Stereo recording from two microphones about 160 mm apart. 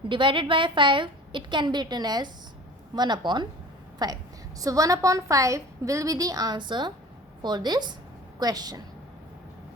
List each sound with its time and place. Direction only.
0.1 s a woman's voice: 30° right (ahead or behind)